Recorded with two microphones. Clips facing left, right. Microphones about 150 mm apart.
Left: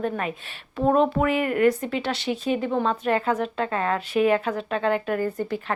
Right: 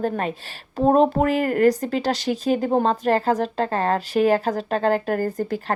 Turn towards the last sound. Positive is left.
turn(degrees=-40)  # may be behind; listen again after turning